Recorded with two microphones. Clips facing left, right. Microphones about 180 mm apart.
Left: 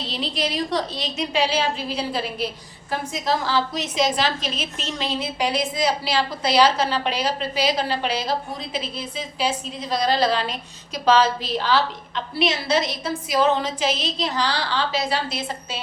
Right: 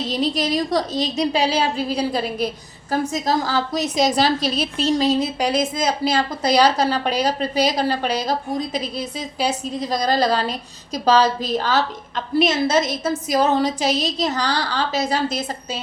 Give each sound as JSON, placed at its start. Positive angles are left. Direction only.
{"t": 0.1, "sound": "a woman's voice", "side_deg": -45}